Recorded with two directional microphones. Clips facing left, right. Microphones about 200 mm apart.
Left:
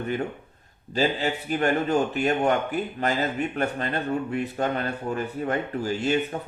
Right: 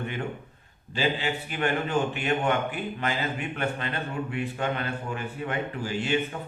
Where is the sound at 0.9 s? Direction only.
40° left (ahead or behind).